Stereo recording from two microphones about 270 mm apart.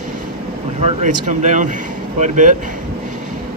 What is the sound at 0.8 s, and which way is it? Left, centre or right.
Speech, right.